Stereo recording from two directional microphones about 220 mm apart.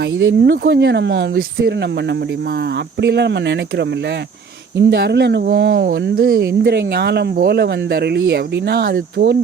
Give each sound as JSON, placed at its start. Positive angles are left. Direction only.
{"t": 0.2, "sound": "speech", "side_deg": -55}
{"t": 3.0, "sound": "speech", "side_deg": -50}
{"t": 4.9, "sound": "speech", "side_deg": -50}